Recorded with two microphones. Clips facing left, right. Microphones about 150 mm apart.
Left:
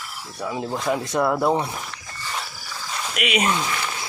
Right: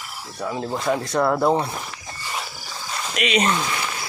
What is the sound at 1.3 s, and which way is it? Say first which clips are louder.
Speech: right 1 dB; 5° right (ahead or behind).